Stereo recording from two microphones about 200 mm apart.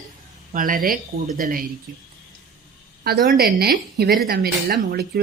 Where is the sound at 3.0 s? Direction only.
50° right (ahead or behind).